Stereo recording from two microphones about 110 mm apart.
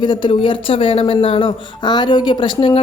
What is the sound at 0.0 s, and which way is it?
Speech, 45° left (ahead or behind).